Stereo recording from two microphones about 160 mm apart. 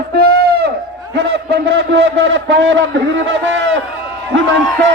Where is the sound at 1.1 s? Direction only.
90° right.